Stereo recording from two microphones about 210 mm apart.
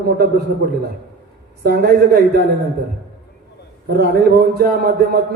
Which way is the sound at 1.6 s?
50° right (ahead or behind).